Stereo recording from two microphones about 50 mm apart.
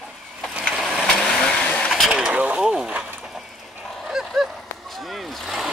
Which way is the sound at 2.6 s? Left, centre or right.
Centre.